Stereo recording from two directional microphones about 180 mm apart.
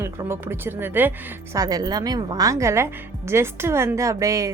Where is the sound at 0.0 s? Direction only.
15° right (ahead or behind).